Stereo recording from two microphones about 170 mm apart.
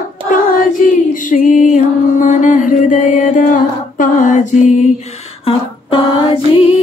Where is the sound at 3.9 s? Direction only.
50° left (ahead or behind).